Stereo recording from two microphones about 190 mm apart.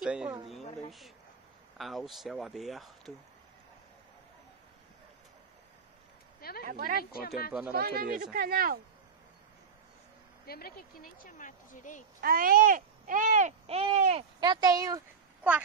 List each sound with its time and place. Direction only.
0.0 s speech: 5° right (ahead or behind)
1.8 s speech: centre (ahead or behind)
6.6 s speech: 50° right (ahead or behind)
7.0 s speech: 55° left (ahead or behind)
7.7 s speech: 55° right (ahead or behind)
10.4 s speech: 55° left (ahead or behind)
12.2 s speech: 50° right (ahead or behind); by 14.2 s 35° right (ahead or behind)
14.4 s speech: 20° right (ahead or behind)